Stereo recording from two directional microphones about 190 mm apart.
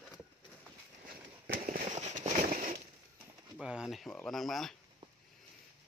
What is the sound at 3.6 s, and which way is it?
Bird, 5° right (ahead or behind).